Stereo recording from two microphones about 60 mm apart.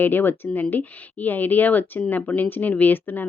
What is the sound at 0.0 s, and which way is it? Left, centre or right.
A woman's voice, left.